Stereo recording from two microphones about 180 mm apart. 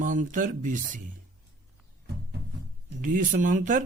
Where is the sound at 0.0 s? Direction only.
45° right (ahead or behind).